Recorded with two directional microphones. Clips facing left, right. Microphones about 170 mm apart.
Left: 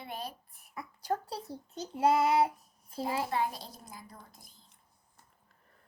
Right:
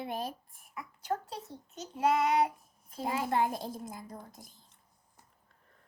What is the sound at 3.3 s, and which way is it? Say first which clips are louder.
Speech: right 3 dB; 50° right (ahead or behind).